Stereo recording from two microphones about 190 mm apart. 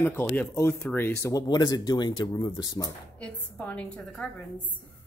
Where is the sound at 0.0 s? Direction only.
10° left (ahead or behind).